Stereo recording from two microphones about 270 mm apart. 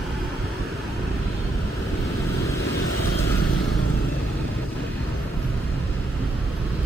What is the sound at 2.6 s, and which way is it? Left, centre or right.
Vehicle, left.